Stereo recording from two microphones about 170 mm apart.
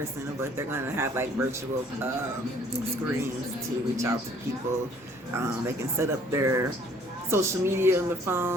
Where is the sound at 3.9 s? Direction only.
20° right (ahead or behind).